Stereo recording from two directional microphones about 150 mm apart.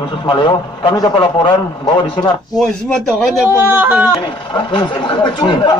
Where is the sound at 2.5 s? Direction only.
5° left (ahead or behind).